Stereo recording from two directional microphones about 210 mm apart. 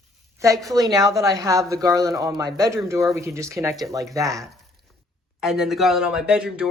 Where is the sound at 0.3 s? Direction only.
15° right (ahead or behind).